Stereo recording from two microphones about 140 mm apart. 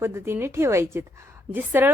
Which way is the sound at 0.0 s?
20° right (ahead or behind).